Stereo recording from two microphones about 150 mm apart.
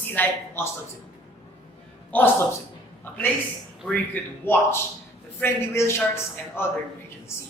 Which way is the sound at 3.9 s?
10° left (ahead or behind).